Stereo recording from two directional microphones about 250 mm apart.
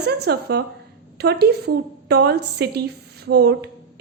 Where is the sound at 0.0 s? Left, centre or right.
Right.